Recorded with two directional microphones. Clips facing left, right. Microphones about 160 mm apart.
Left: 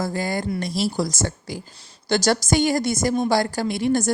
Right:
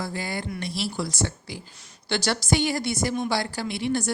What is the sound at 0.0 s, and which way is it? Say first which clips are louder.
A woman's voice: left 6 dB; 45° left (ahead or behind).